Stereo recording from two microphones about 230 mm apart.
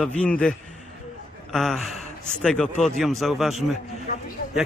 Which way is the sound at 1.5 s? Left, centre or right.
Centre.